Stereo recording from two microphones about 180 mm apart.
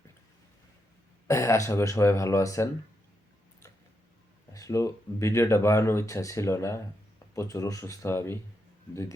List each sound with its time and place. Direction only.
1.3 s speech: 15° left (ahead or behind)
4.5 s speech: 20° left (ahead or behind)